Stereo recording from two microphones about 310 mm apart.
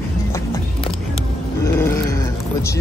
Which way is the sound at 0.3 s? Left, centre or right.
Centre.